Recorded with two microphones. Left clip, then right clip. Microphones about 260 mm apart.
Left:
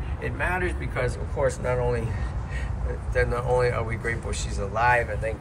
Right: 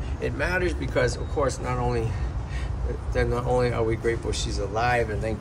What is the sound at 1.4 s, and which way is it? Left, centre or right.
Speech, centre.